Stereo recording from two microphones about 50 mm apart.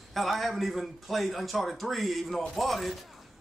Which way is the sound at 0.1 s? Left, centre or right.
Centre.